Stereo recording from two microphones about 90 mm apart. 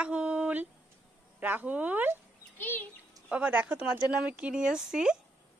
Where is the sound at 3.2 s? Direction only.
15° right (ahead or behind).